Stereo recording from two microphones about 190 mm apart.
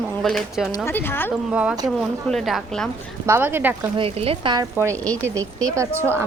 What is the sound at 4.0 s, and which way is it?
Speech, 30° right (ahead or behind).